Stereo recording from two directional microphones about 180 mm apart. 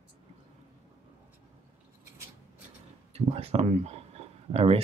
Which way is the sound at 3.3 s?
35° right (ahead or behind).